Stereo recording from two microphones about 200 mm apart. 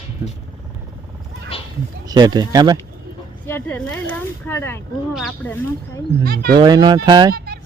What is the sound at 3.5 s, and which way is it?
Speech, 10° left (ahead or behind).